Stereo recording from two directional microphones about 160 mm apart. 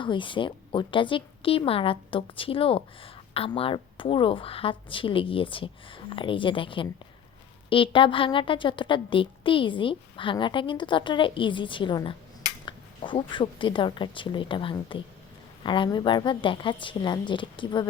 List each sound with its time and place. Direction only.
0.0 s a woman's voice: 30° left (ahead or behind)